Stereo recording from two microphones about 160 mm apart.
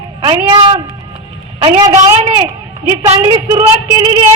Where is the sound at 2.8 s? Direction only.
40° right (ahead or behind).